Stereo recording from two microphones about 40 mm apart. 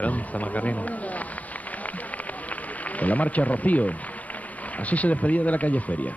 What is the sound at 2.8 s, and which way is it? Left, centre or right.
Speech, left.